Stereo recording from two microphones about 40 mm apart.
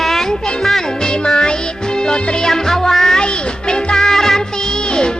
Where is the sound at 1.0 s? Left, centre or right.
Left.